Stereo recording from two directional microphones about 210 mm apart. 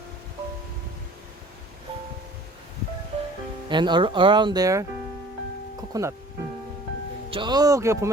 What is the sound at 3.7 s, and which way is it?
Speech, 20° right (ahead or behind).